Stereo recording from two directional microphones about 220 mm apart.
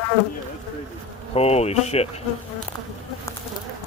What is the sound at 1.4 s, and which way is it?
Speech, 30° left (ahead or behind).